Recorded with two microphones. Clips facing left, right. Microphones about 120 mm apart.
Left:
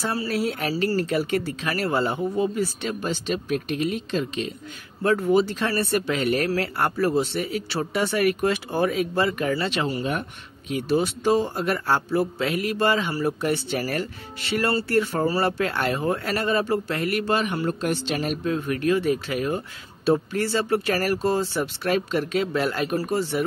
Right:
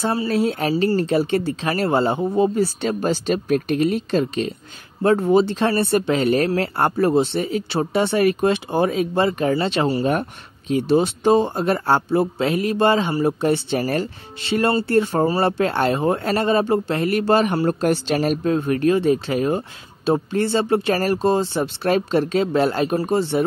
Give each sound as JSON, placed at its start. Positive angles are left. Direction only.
{"t": 0.0, "sound": "speech", "side_deg": -25}
{"t": 5.0, "sound": "speech", "side_deg": -30}
{"t": 10.7, "sound": "speech", "side_deg": -25}